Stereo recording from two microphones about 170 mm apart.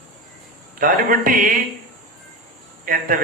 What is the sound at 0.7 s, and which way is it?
Speech, 55° right (ahead or behind).